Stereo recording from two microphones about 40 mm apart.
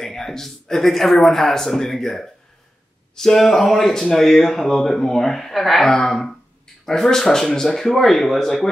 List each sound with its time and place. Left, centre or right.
0.0 s speech: centre